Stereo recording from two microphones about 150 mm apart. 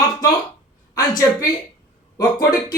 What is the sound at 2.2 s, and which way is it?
Speech, 25° left (ahead or behind).